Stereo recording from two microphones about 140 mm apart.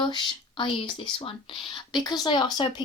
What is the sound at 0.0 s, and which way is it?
Speech, 35° left (ahead or behind).